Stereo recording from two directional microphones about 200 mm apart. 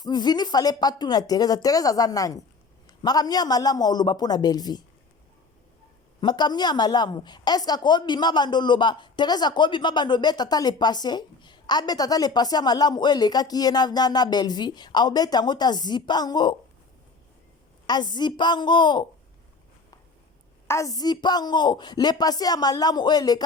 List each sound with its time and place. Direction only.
0.0 s a woman's voice: 20° left (ahead or behind)
6.1 s a woman's voice: 20° left (ahead or behind)
17.8 s a woman's voice: 20° left (ahead or behind)
20.7 s a woman's voice: 15° left (ahead or behind)